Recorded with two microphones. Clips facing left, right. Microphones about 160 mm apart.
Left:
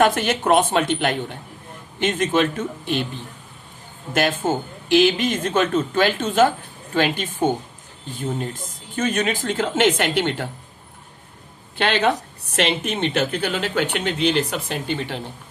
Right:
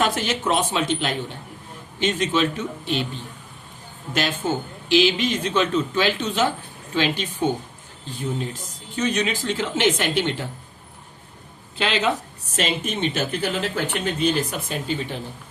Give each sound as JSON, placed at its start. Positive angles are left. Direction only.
{"t": 0.0, "sound": "speech", "side_deg": 55}
{"t": 4.1, "sound": "speech", "side_deg": 50}
{"t": 11.8, "sound": "speech", "side_deg": 60}